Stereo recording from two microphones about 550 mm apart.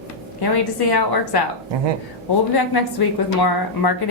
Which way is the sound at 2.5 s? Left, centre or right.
Left.